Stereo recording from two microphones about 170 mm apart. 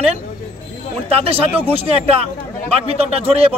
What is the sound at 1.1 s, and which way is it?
Speech, 35° right (ahead or behind).